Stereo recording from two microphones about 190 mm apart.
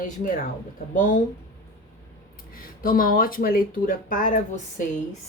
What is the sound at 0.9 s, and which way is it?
Speech, 45° left (ahead or behind).